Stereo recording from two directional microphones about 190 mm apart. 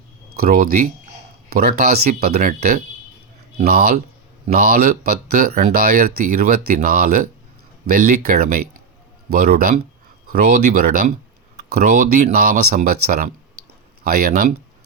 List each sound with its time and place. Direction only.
0.3 s speech: 50° right (ahead or behind)
2.3 s speech: 40° right (ahead or behind)